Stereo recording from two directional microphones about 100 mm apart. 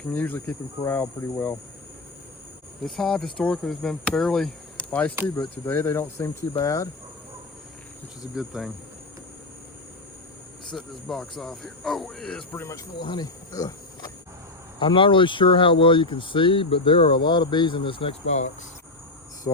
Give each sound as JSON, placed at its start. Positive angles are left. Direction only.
{"t": 0.1, "sound": "speech", "side_deg": 15}
{"t": 2.8, "sound": "speech", "side_deg": 5}
{"t": 4.9, "sound": "speech", "side_deg": 15}
{"t": 8.4, "sound": "speech", "side_deg": 0}
{"t": 10.7, "sound": "speech", "side_deg": 5}
{"t": 12.5, "sound": "speech", "side_deg": 25}
{"t": 13.0, "sound": "speech", "side_deg": 45}
{"t": 14.8, "sound": "speech", "side_deg": 55}